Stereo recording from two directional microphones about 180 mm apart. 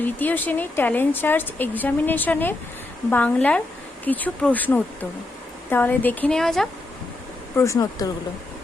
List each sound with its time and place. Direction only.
0.0 s speech: 10° left (ahead or behind)
7.5 s speech: 15° left (ahead or behind)